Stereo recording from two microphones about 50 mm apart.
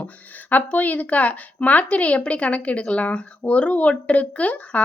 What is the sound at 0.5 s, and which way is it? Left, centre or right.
Speech, left.